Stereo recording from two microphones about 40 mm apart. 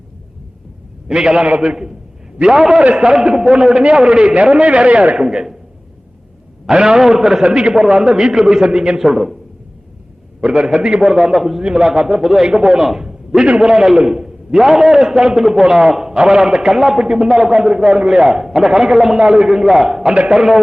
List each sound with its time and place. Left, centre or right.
1.0 s a man's voice: right
1.6 s a man's voice: centre; by 5.1 s right
5.1 s a man's voice: centre
6.7 s a man's voice: centre
7.4 s a man's voice: right
10.4 s a man's voice: right
11.0 s a man's voice: centre
12.2 s a man's voice: centre
12.5 s a man's voice: centre